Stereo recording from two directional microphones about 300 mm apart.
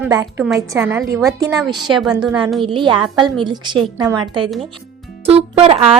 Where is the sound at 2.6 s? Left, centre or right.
Centre.